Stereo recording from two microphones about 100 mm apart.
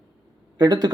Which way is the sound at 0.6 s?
45° right (ahead or behind).